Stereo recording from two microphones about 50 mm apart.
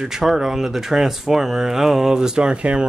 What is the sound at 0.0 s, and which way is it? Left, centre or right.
A man's voice, centre.